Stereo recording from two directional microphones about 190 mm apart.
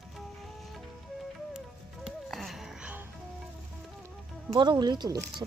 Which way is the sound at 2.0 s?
Centre (ahead or behind).